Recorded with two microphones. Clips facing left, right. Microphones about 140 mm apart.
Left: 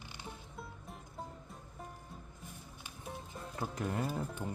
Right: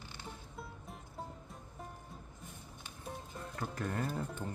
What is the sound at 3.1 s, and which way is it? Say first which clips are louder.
Music: even; 5° left (ahead or behind).